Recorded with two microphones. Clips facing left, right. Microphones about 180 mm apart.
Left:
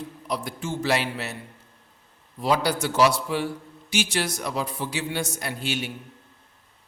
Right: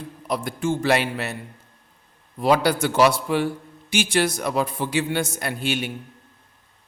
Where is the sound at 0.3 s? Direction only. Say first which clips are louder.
Right 6 dB; 55° right (ahead or behind).